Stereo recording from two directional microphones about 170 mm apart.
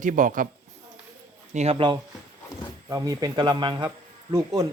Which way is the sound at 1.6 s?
35° right (ahead or behind).